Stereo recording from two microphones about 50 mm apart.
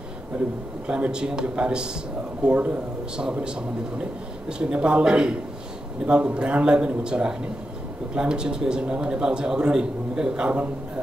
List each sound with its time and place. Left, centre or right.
0.8 s a man's voice: right